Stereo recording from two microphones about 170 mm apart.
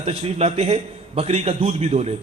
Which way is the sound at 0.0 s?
35° right (ahead or behind).